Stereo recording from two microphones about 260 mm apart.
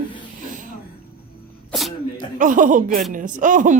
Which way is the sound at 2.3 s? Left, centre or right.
Right.